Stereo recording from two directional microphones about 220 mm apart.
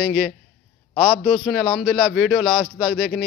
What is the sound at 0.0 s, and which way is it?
A man's voice, centre (ahead or behind).